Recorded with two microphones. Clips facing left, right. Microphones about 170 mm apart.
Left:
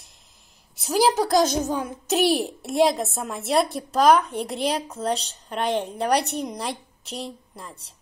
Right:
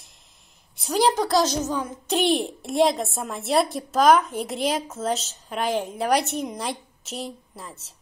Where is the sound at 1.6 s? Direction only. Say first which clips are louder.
Left 1 dB; 15° left (ahead or behind).